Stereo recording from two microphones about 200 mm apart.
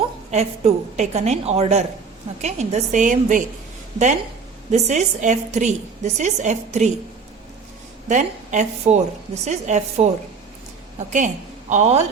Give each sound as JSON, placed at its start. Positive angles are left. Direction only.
{"t": 0.3, "sound": "a woman's voice", "side_deg": -35}
{"t": 8.0, "sound": "a woman's voice", "side_deg": -35}
{"t": 11.7, "sound": "a woman's voice", "side_deg": -35}